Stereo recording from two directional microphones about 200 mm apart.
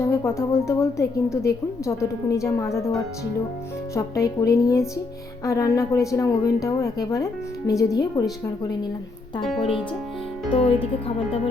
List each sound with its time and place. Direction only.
0.0 s a woman's voice: 15° left (ahead or behind)
3.9 s a woman's voice: 15° left (ahead or behind)
10.5 s speech: 25° left (ahead or behind)